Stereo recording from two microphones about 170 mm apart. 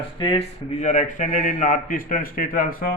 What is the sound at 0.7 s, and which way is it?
A man's voice, 45° left (ahead or behind).